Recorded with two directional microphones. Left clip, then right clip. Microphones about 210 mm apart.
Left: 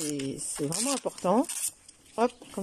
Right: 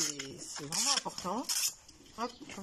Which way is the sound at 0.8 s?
55° left (ahead or behind).